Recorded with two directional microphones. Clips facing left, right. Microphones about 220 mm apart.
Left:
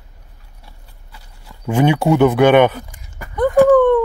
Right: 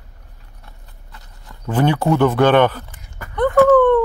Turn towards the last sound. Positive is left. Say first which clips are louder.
# left 1 dB
turn(degrees=10)  # may be behind; listen again after turning